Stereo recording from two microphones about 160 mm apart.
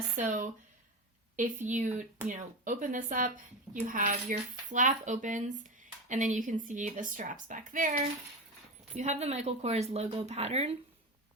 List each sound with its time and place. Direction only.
0.2 s speech: 50° right (ahead or behind)
1.6 s speech: 50° right (ahead or behind)
8.9 s speech: 45° right (ahead or behind)